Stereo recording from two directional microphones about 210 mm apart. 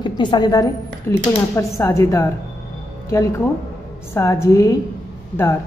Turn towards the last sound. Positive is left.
turn(degrees=10)  # may be behind; listen again after turning